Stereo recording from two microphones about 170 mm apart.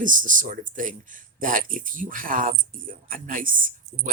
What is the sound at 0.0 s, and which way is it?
Speech, 50° right (ahead or behind).